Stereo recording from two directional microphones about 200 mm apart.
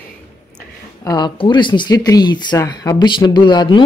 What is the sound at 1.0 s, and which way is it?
Speech, 20° left (ahead or behind).